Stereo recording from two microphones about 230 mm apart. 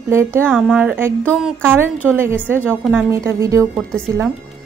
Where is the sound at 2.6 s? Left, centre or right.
Centre.